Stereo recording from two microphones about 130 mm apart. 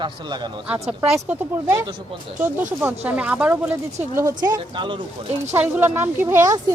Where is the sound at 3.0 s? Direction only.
10° right (ahead or behind).